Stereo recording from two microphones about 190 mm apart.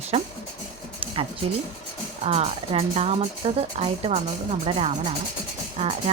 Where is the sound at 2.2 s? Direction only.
30° right (ahead or behind).